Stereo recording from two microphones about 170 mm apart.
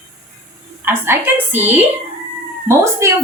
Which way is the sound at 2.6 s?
15° right (ahead or behind).